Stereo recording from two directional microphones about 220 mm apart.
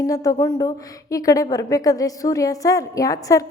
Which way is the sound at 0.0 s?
15° left (ahead or behind).